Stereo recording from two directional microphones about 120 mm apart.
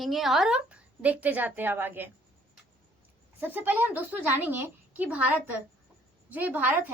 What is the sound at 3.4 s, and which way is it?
A woman's voice, 15° right (ahead or behind).